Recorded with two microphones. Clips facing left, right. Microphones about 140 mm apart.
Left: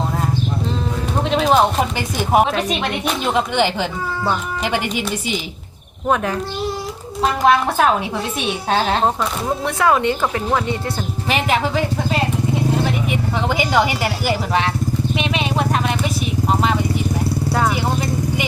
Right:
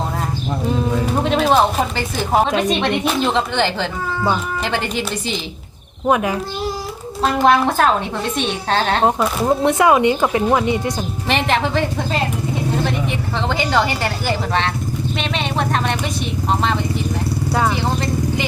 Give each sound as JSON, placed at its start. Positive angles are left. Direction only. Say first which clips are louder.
{"t": 1.2, "sound": "a sound", "louder": "left 1 dB", "side_deg": 0}
{"t": 2.0, "sound": "speech", "louder": "left 2 dB", "side_deg": 15}
{"t": 2.6, "sound": "a woman's voice", "louder": "right 3 dB", "side_deg": 5}
{"t": 6.1, "sound": "speech", "louder": "right 2 dB", "side_deg": -10}
{"t": 7.2, "sound": "a woman's voice", "louder": "right 1 dB", "side_deg": 5}
{"t": 9.6, "sound": "speech", "louder": "right 2 dB", "side_deg": -15}
{"t": 11.3, "sound": "a woman's voice", "louder": "right 1 dB", "side_deg": 5}
{"t": 13.1, "sound": "speech", "louder": "left 1 dB", "side_deg": 10}
{"t": 15.2, "sound": "vehicle", "louder": "even", "side_deg": 5}